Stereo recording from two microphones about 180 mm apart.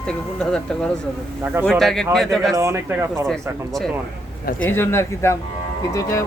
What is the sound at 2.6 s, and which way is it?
Speech, 15° right (ahead or behind).